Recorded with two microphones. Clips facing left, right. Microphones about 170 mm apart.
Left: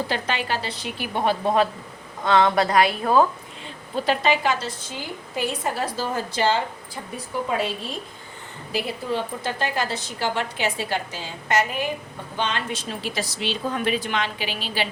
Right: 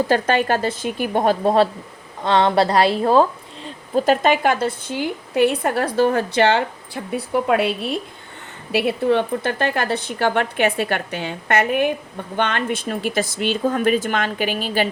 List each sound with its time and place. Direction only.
0.1 s speech: 50° right (ahead or behind); by 3.2 s 30° right (ahead or behind)
3.9 s a woman's voice: 45° right (ahead or behind); by 7.7 s 70° right (ahead or behind)
8.7 s a woman's voice: 65° right (ahead or behind); by 14.8 s 50° right (ahead or behind)